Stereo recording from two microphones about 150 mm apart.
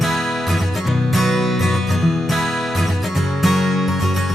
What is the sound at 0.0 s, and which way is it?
Music, centre (ahead or behind).